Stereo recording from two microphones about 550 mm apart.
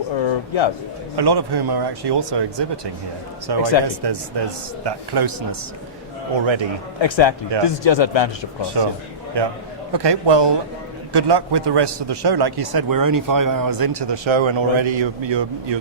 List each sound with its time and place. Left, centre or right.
0.3 s a man's voice: left
1.1 s a man's voice: right
6.3 s speech: right
7.0 s speech: left
8.8 s a man's voice: right